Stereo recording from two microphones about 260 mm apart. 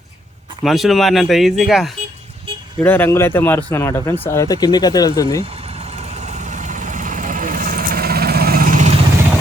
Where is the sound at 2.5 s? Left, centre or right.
Right.